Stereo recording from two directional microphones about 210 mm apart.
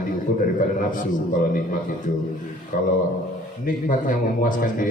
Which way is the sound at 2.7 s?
40° left (ahead or behind).